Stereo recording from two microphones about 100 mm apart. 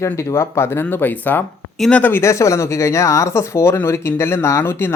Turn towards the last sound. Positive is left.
turn(degrees=20)  # may be behind; listen again after turning